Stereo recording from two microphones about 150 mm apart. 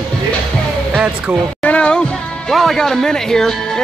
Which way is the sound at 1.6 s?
10° left (ahead or behind).